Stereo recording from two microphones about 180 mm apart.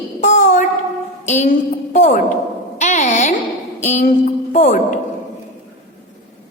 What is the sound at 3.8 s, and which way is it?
A woman's voice, 40° left (ahead or behind).